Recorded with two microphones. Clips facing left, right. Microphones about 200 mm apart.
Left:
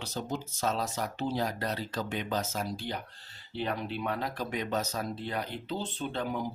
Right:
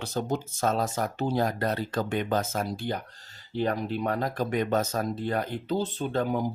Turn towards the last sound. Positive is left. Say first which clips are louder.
# right 6 dB
turn(degrees=-45)  # may be behind; listen again after turning